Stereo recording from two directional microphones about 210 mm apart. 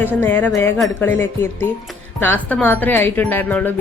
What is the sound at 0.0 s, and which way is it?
Speech, 10° left (ahead or behind).